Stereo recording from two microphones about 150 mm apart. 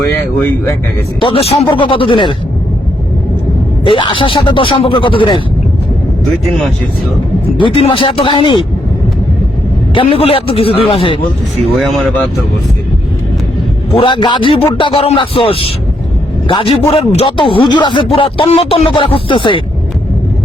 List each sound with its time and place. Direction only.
0.3 s speech: 15° left (ahead or behind)
1.2 s speech: 40° left (ahead or behind)
3.8 s speech: 35° left (ahead or behind)
6.4 s speech: centre (ahead or behind)
7.6 s speech: 35° left (ahead or behind)
9.9 s speech: 35° left (ahead or behind)
11.7 s speech: centre (ahead or behind)
13.9 s speech: 35° left (ahead or behind)